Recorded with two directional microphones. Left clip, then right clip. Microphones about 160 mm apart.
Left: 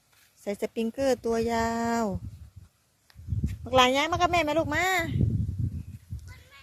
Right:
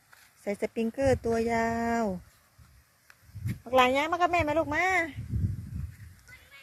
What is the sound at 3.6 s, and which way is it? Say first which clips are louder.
Speech: left 2 dB; 25° left (ahead or behind).